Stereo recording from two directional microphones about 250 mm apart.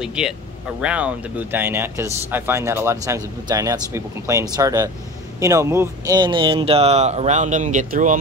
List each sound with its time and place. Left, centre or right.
0.0 s speech: centre; by 8.2 s right